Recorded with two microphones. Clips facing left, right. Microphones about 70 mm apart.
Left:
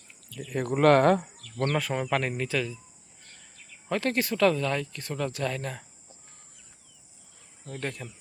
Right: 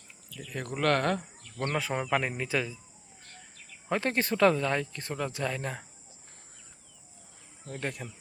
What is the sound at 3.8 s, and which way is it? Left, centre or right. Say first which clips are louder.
Speech: left 1 dB; right.